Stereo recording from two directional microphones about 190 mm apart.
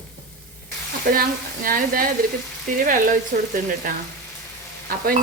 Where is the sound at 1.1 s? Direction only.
55° right (ahead or behind).